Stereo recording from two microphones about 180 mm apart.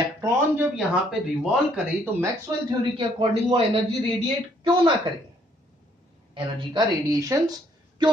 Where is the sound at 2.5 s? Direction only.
20° right (ahead or behind).